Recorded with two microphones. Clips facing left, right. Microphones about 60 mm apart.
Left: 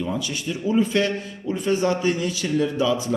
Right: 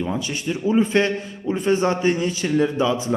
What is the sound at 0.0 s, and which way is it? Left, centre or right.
A man's voice, right.